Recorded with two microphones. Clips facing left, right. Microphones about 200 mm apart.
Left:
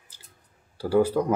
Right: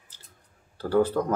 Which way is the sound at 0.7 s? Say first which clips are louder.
Left 1 dB; 10° left (ahead or behind).